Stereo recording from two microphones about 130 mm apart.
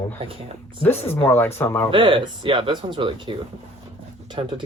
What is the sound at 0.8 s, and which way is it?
Speech, 15° left (ahead or behind).